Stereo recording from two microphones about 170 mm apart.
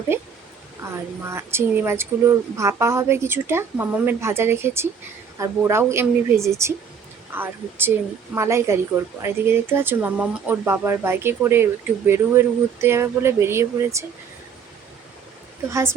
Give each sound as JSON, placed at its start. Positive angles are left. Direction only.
{"t": 0.1, "sound": "speech", "side_deg": -15}
{"t": 15.7, "sound": "speech", "side_deg": -15}